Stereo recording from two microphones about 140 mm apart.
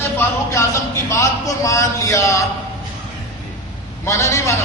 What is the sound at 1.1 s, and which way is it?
A man's voice, 20° left (ahead or behind).